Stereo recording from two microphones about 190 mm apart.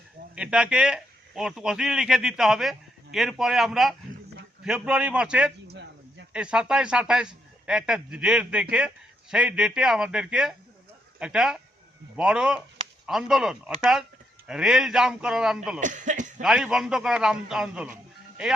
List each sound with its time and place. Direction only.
0.3 s a man's voice: 5° right (ahead or behind)
5.6 s a sound: 65° right (ahead or behind)
6.3 s speech: 5° right (ahead or behind)
15.8 s speech: 40° right (ahead or behind)
16.4 s speech: 5° right (ahead or behind)